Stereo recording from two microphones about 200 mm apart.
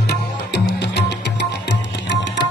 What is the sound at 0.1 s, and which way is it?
Music, 55° left (ahead or behind).